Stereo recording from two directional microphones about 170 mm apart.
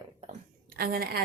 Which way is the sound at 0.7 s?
65° right (ahead or behind).